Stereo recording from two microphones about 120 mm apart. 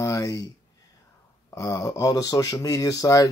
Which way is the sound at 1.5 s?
25° left (ahead or behind).